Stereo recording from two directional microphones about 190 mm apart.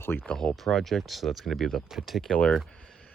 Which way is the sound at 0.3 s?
5° left (ahead or behind).